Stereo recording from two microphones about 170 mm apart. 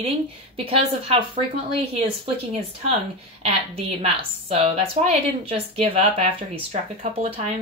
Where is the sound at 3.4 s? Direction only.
35° right (ahead or behind).